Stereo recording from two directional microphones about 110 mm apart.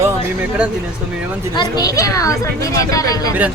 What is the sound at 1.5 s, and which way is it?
A woman's voice, 40° left (ahead or behind).